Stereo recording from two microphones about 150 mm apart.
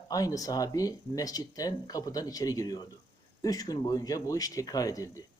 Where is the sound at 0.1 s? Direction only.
25° left (ahead or behind).